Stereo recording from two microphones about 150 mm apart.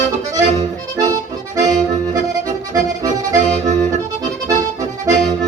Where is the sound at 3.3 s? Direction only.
55° right (ahead or behind).